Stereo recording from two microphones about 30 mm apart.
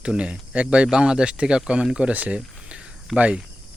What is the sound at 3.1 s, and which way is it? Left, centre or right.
Speech, left.